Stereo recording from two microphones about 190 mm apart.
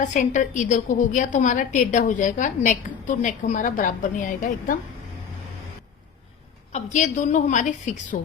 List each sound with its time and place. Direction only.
0.0 s a woman's voice: 40° left (ahead or behind)
6.7 s a woman's voice: 40° left (ahead or behind)